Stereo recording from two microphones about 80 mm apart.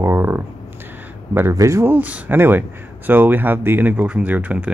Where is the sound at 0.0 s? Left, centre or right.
Right.